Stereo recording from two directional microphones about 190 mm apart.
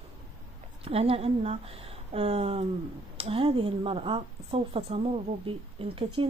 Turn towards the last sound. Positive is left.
turn(degrees=-30)  # may be behind; listen again after turning